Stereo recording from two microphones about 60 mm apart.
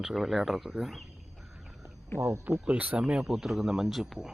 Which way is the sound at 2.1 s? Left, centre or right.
Right.